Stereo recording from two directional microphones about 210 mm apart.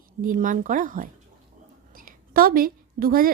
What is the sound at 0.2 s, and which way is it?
A woman's voice, 40° right (ahead or behind).